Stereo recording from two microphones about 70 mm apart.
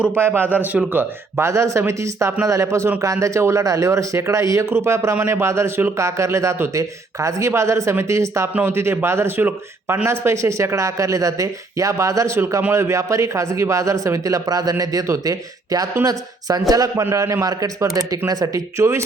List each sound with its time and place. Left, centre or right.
0.1 s a man's voice: right
0.9 s a man's voice: right
17.1 s a man's voice: right
17.4 s speech: right
18.8 s a man's voice: right